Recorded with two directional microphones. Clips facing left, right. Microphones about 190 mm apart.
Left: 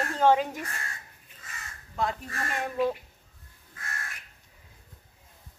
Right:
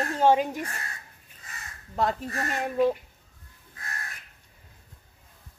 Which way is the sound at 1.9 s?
35° right (ahead or behind).